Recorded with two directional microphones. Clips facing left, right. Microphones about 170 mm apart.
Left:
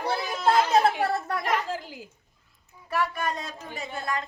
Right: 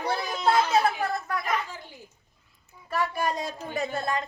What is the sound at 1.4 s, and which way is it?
Speech, 85° left.